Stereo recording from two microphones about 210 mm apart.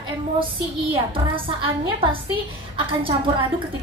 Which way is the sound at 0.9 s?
25° right (ahead or behind).